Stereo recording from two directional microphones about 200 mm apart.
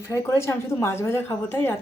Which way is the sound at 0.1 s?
15° left (ahead or behind).